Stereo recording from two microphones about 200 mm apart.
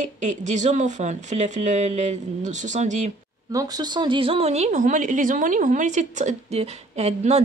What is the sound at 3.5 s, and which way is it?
Speech, 20° right (ahead or behind).